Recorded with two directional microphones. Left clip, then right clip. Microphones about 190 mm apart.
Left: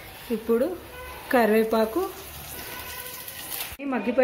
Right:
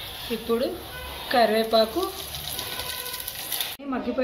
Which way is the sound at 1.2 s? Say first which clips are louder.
Even; 50° left (ahead or behind).